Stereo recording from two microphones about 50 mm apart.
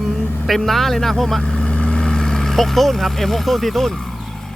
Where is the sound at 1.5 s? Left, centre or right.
Centre.